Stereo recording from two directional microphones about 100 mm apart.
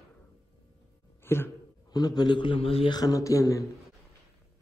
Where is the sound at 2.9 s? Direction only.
35° left (ahead or behind).